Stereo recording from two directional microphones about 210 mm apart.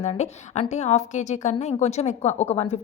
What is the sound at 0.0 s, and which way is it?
A woman's voice, 30° left (ahead or behind).